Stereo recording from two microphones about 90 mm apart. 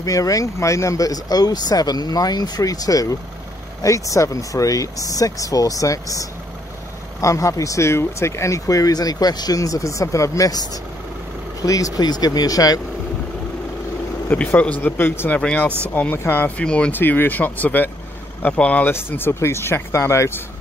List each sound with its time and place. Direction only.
0.0 s speech: 40° left (ahead or behind)
14.2 s speech: 20° left (ahead or behind)
18.9 s speech: 25° left (ahead or behind)